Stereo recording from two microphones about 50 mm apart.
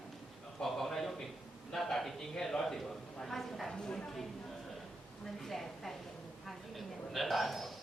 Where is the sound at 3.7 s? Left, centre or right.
Centre.